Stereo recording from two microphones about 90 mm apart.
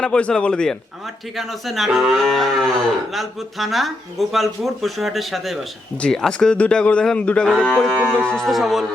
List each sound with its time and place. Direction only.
0.0 s speech: 10° left (ahead or behind)
7.9 s speech: 20° right (ahead or behind)
8.2 s speech: 10° left (ahead or behind)
8.4 s speech: centre (ahead or behind)